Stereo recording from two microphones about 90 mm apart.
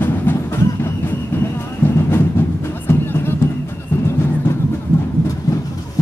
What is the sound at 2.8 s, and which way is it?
Music, 25° left (ahead or behind).